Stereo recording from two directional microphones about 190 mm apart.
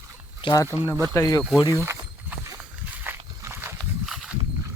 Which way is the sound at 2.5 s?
15° right (ahead or behind).